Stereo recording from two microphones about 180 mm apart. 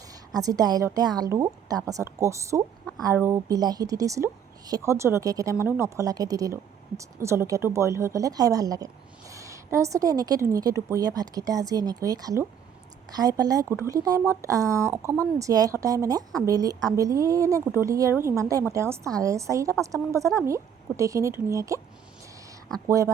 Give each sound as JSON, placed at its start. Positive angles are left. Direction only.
{"t": 0.1, "sound": "a woman's voice", "side_deg": -20}
{"t": 22.9, "sound": "a woman's voice", "side_deg": -15}